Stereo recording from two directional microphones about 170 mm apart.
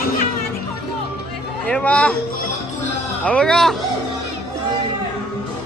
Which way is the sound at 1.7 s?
5° left (ahead or behind).